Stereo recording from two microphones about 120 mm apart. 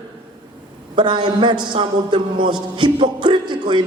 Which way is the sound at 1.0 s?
40° right (ahead or behind).